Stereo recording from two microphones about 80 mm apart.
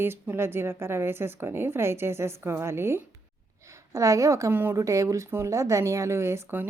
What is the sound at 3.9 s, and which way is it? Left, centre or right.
Speech, right.